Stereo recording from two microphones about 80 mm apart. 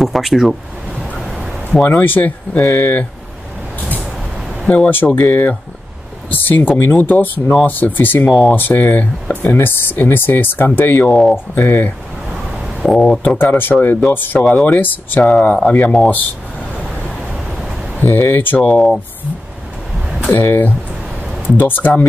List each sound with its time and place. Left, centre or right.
0.0 s speech: centre
1.2 s a sound: centre
1.9 s speech: left
4.6 s speech: centre
8.3 s speech: centre
8.5 s speech: left
12.8 s speech: centre
13.2 s speech: left
18.0 s speech: left
18.6 s speech: centre
20.2 s speech: left